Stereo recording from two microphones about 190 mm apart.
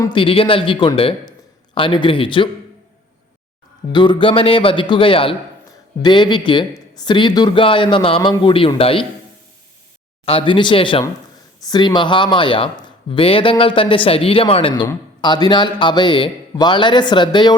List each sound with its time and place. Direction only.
0.0 s speech: 25° left (ahead or behind)
3.9 s speech: 25° left (ahead or behind)
10.2 s speech: 25° left (ahead or behind)